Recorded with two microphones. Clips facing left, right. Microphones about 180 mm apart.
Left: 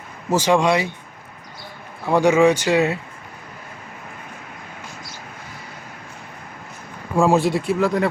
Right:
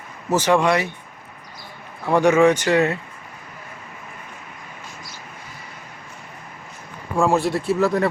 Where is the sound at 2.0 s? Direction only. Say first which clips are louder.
Even; 10° left (ahead or behind).